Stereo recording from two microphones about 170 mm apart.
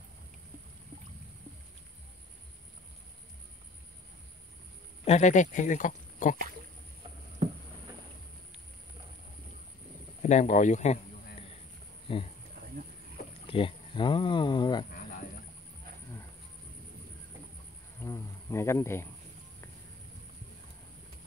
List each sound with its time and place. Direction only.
5.0 s speech: 40° left (ahead or behind)
10.2 s speech: 45° left (ahead or behind)
12.1 s speech: 35° left (ahead or behind)
13.5 s speech: 30° left (ahead or behind)
18.0 s insect: 15° left (ahead or behind)